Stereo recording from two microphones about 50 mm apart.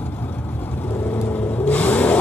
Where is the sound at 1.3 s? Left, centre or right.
Left.